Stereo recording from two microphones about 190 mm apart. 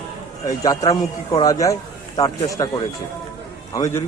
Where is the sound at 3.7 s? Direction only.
15° left (ahead or behind).